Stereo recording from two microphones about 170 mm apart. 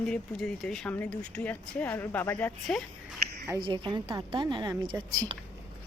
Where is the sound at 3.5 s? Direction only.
25° right (ahead or behind).